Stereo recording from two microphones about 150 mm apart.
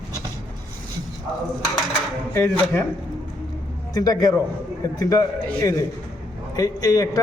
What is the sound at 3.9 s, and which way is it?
A woman's voice, 25° left (ahead or behind).